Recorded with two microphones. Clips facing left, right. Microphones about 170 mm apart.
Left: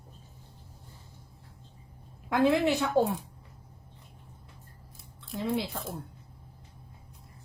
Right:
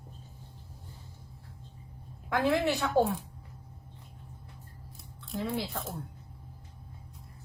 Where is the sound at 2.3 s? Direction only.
20° left (ahead or behind).